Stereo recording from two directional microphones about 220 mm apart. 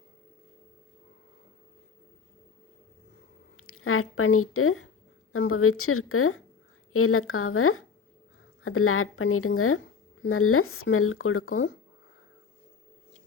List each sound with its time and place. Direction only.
3.6 s speech: 75° left (ahead or behind)